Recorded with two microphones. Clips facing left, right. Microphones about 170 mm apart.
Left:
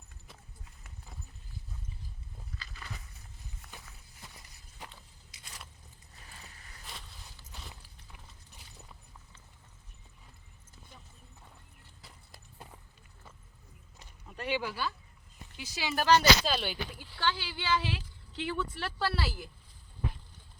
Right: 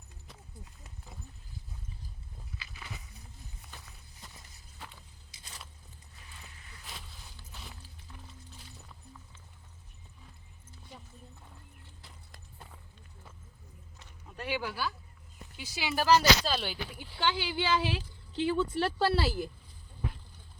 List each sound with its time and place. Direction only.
2.6 s a sound: 10° right (ahead or behind)
6.8 s walk: centre (ahead or behind)
14.3 s speech: 5° right (ahead or behind)
17.0 s speech: 20° right (ahead or behind)